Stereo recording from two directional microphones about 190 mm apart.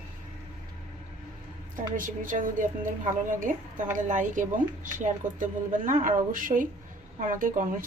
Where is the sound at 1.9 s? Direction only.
45° right (ahead or behind).